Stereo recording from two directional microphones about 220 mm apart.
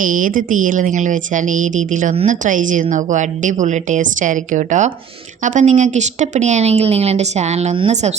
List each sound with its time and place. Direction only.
0.0 s a woman's voice: 35° right (ahead or behind)